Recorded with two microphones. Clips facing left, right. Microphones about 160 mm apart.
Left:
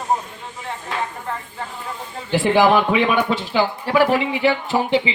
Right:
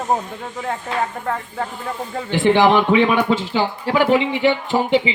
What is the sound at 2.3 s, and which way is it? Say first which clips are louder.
Speech: right 1 dB; 20° right (ahead or behind).